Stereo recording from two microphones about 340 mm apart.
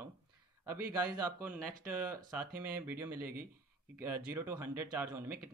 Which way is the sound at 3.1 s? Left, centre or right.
Right.